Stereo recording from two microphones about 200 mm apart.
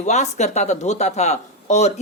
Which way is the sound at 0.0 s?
35° left (ahead or behind).